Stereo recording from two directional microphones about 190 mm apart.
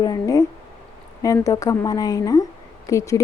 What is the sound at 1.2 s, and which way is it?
A woman's voice, 20° left (ahead or behind).